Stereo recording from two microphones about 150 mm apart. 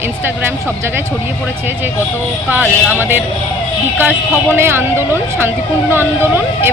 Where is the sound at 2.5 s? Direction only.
10° right (ahead or behind).